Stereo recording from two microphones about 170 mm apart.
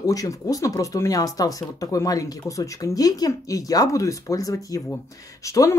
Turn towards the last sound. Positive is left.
turn(degrees=20)  # may be behind; listen again after turning